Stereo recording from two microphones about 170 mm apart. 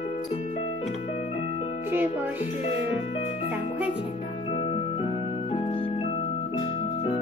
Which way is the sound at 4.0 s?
30° left (ahead or behind).